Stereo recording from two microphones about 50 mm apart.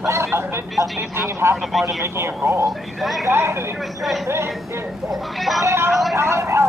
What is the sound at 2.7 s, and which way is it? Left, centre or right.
Speech, centre.